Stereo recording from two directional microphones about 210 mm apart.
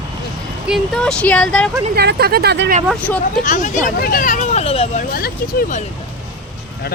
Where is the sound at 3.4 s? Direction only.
35° left (ahead or behind).